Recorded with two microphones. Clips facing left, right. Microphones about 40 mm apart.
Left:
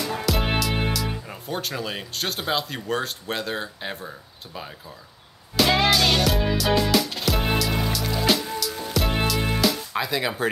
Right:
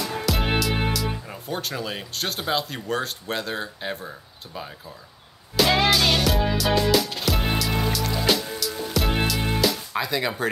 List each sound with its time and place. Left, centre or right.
0.0 s speech: centre
5.6 s music: centre